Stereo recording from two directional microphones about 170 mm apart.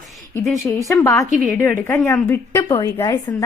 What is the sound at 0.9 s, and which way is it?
A woman's voice, 15° left (ahead or behind).